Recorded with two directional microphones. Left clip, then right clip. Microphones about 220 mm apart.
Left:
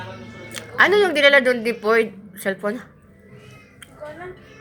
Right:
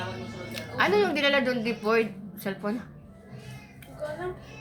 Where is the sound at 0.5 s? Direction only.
30° left (ahead or behind).